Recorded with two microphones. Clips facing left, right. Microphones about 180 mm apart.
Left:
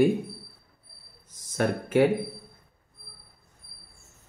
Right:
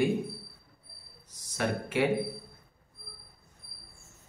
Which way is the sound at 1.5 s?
50° left (ahead or behind).